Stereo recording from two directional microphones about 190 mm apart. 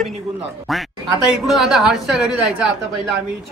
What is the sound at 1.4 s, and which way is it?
Speech, centre (ahead or behind).